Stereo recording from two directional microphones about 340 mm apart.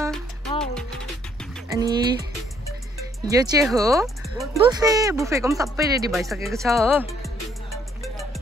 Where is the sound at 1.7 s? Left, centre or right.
Centre.